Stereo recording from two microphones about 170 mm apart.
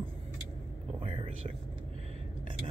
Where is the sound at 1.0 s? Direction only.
30° right (ahead or behind).